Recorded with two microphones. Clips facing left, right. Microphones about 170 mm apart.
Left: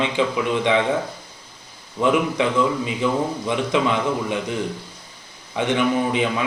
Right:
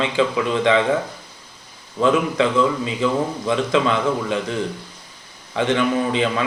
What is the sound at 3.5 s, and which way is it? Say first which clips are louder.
A man's voice: right 3 dB; 15° left (ahead or behind).